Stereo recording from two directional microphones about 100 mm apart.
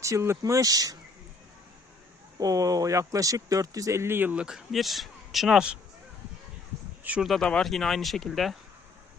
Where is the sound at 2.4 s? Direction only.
35° right (ahead or behind); by 4.4 s 20° right (ahead or behind).